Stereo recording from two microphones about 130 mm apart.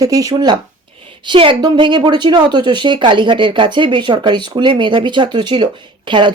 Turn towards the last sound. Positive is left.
turn(degrees=-35)  # may be behind; listen again after turning